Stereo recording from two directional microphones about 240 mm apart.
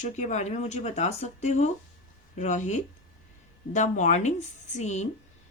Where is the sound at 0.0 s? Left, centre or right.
Left.